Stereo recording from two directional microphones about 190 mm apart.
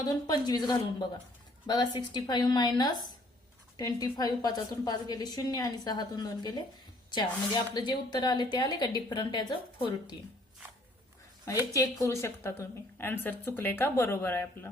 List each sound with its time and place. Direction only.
0.0 s a woman's voice: 20° left (ahead or behind)
11.7 s a woman's voice: 15° left (ahead or behind)